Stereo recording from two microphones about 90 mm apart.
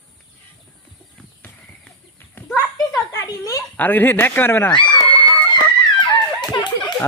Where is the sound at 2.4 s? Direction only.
25° left (ahead or behind).